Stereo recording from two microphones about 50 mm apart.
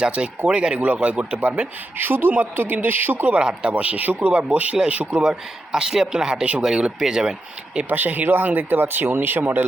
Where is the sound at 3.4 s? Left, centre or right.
Right.